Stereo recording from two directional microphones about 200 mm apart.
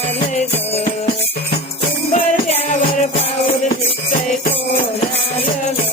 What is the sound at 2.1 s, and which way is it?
Music, 40° left (ahead or behind).